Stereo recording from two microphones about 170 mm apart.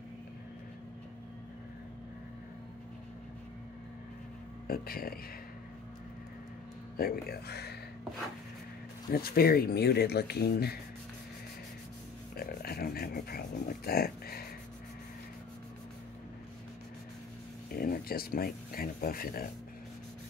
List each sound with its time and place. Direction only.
4.6 s speech: 60° left (ahead or behind)
7.0 s speech: 65° left (ahead or behind)
9.1 s speech: 65° left (ahead or behind)
12.4 s a sound: 65° left (ahead or behind)
13.8 s speech: 60° left (ahead or behind)
17.7 s speech: 60° left (ahead or behind)